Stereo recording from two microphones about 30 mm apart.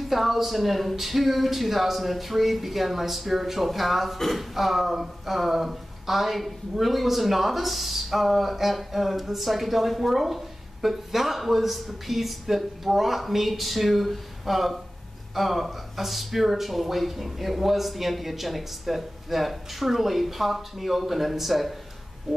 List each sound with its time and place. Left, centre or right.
0.1 s speech: centre